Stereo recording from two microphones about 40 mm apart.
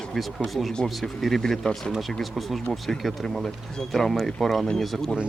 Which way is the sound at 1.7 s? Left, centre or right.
Left.